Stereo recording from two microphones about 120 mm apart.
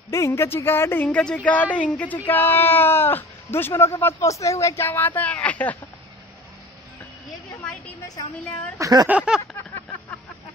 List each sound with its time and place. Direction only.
0.1 s speech: 25° left (ahead or behind)
8.7 s speech: 25° right (ahead or behind)
9.0 s a sound: 10° right (ahead or behind)